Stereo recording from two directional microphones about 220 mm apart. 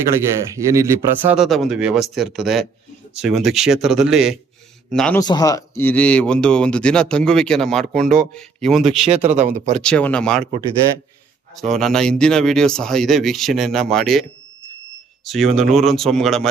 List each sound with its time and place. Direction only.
0.1 s speech: 15° right (ahead or behind); by 5.2 s 5° left (ahead or behind)
5.2 s speech: 15° left (ahead or behind); by 7.9 s centre (ahead or behind)
7.9 s speech: 40° right (ahead or behind)
8.3 s speech: centre (ahead or behind)
9.0 s speech: 25° right (ahead or behind)
9.8 s speech: 5° left (ahead or behind)
11.5 s speech: centre (ahead or behind)